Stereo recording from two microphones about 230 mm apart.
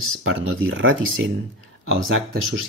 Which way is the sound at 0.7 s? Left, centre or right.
Right.